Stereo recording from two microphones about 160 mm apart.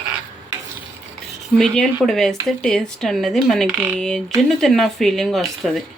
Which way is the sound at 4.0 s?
5° left (ahead or behind).